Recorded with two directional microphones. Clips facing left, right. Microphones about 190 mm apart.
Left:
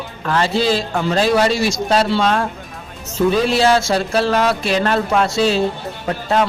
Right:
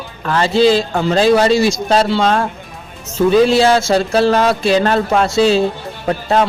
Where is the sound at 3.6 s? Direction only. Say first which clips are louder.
Right 3 dB; 25° right (ahead or behind).